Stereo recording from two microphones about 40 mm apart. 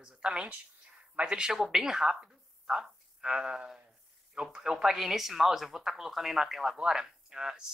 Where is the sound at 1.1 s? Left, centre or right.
Right.